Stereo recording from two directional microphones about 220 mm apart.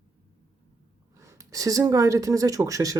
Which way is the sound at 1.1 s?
15° right (ahead or behind).